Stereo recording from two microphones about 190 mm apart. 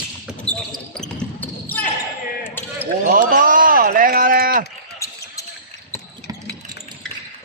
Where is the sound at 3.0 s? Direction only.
45° right (ahead or behind).